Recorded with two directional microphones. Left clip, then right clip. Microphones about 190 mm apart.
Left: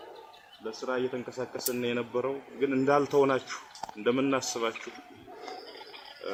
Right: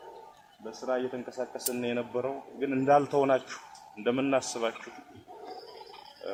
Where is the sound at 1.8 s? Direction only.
55° right (ahead or behind).